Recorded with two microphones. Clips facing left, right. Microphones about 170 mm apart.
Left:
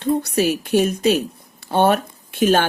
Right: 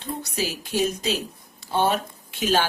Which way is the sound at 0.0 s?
65° left (ahead or behind).